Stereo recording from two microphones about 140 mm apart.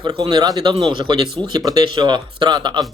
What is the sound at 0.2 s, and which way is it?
Speech, 30° right (ahead or behind).